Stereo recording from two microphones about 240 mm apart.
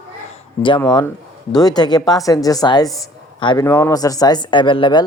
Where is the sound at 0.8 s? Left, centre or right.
Centre.